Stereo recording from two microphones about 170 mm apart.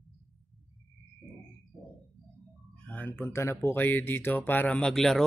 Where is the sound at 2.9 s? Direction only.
10° left (ahead or behind).